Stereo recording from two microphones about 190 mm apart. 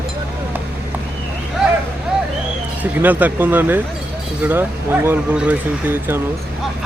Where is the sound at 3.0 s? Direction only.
10° right (ahead or behind).